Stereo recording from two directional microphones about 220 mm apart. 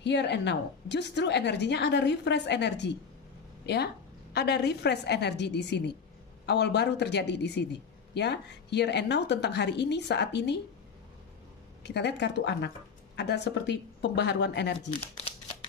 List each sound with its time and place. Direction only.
0.0 s speech: 50° left (ahead or behind)
11.8 s speech: 50° left (ahead or behind)
14.9 s speech: 25° left (ahead or behind)